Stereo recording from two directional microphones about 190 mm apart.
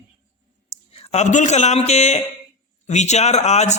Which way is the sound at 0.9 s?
35° left (ahead or behind).